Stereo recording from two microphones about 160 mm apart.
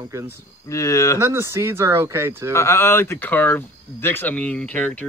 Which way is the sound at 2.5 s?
15° left (ahead or behind).